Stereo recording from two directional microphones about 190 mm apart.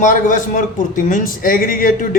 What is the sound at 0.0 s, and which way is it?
A man's voice, 45° left (ahead or behind).